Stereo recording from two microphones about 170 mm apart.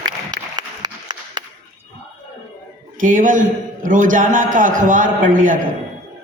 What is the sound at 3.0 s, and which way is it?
A man's voice, 50° right (ahead or behind).